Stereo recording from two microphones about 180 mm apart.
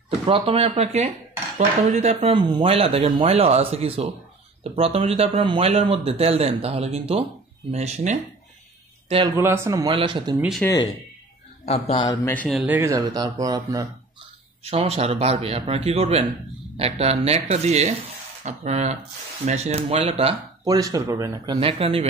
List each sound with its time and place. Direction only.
0.3 s speech: 35° right (ahead or behind)
9.4 s speech: 15° right (ahead or behind)
10.6 s speech: 20° left (ahead or behind)
11.6 s speech: 35° left (ahead or behind)
12.3 s speech: 10° left (ahead or behind)
12.5 s speech: 10° right (ahead or behind)
14.6 s speech: 35° right (ahead or behind)
20.6 s speech: 20° right (ahead or behind)